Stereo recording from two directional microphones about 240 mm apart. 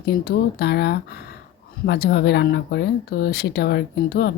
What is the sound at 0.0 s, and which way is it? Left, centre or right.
Speech, left.